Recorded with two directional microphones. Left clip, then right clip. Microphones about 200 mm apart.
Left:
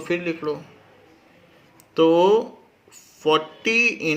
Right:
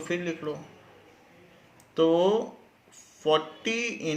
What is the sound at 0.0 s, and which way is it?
Speech, 40° left (ahead or behind).